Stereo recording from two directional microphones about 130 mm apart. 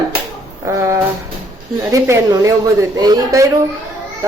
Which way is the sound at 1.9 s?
25° right (ahead or behind).